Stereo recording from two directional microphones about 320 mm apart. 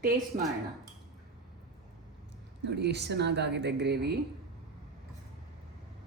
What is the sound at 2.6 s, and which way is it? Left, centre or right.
Speech, right.